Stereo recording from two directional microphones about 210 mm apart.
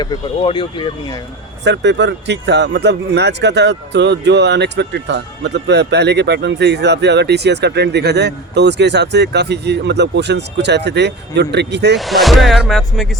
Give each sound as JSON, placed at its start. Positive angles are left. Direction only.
{"t": 0.3, "sound": "speech", "side_deg": 25}
{"t": 1.6, "sound": "speech", "side_deg": -55}
{"t": 11.9, "sound": "speech", "side_deg": 0}